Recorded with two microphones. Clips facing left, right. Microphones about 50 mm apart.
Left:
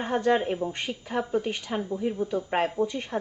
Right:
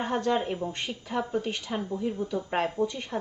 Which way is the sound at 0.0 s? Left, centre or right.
Left.